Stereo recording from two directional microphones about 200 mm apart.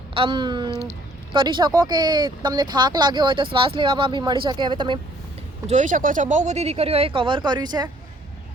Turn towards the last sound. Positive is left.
turn(degrees=-20)  # may be behind; listen again after turning